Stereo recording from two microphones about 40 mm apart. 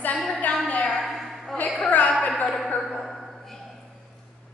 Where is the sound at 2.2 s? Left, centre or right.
Left.